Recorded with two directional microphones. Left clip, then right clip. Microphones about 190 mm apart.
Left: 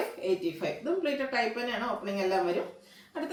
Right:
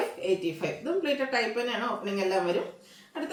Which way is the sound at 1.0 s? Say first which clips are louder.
Right 2 dB; 15° right (ahead or behind).